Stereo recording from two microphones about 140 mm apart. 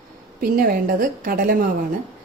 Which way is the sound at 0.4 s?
85° right.